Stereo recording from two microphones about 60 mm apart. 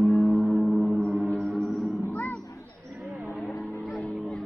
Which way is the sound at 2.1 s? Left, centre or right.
Left.